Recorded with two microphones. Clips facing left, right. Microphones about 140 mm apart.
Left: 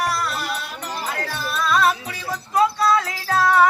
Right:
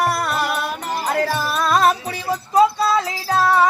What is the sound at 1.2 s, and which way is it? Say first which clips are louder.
Music: right 4 dB; 40° right (ahead or behind).